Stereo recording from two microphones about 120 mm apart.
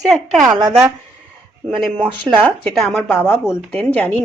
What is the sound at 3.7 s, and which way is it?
Speech, 10° left (ahead or behind).